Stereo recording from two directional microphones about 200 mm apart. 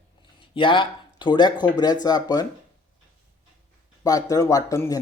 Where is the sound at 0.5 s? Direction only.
25° left (ahead or behind).